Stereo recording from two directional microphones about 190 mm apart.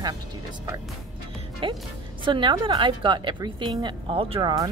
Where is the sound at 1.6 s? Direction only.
25° right (ahead or behind).